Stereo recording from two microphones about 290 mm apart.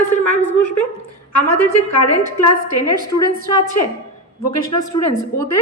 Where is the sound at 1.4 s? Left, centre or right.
Left.